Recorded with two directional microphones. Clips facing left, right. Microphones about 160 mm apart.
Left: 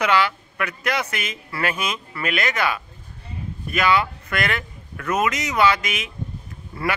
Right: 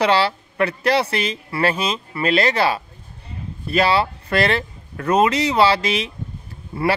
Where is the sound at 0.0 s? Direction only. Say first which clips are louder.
Right 3 dB; 30° right (ahead or behind).